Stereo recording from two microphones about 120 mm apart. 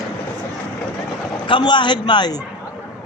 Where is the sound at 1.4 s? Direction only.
40° left (ahead or behind).